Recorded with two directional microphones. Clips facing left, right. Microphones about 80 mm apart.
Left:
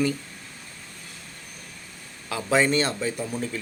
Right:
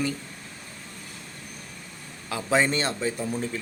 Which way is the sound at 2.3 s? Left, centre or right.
Right.